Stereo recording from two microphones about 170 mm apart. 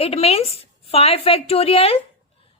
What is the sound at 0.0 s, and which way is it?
Female singing, 35° left (ahead or behind).